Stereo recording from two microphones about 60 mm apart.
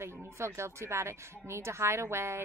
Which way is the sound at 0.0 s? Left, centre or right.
Right.